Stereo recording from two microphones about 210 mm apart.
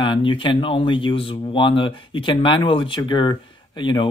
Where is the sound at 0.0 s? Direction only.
25° left (ahead or behind).